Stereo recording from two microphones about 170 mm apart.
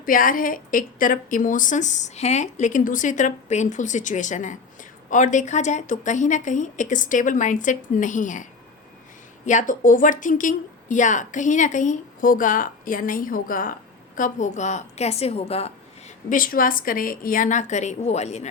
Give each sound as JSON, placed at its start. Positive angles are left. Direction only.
{"t": 0.0, "sound": "a woman's voice", "side_deg": 55}
{"t": 9.5, "sound": "a woman's voice", "side_deg": 50}
{"t": 16.3, "sound": "a woman's voice", "side_deg": 55}